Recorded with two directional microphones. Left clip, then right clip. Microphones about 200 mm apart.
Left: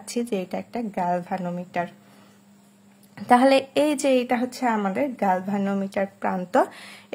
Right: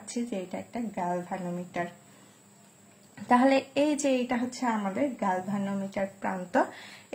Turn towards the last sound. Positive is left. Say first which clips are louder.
# left 6 dB
turn(degrees=40)  # may be behind; listen again after turning